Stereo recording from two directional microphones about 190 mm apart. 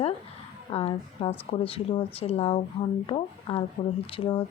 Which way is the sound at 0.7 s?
30° left (ahead or behind).